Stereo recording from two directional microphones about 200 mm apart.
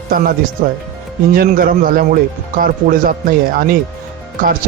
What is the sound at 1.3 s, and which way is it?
Speech, 45° right (ahead or behind).